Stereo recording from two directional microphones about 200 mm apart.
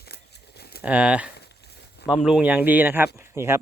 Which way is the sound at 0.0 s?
55° left (ahead or behind).